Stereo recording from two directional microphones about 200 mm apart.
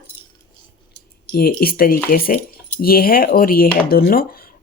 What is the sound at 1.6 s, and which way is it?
Speech, 50° left (ahead or behind).